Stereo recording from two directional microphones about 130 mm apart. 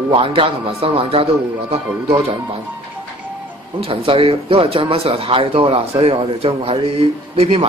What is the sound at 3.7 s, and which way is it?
Speech, 45° right (ahead or behind).